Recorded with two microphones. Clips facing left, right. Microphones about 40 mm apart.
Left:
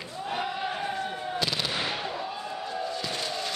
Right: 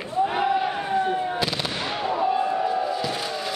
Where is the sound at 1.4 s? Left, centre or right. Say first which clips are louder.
Right 3 dB; centre.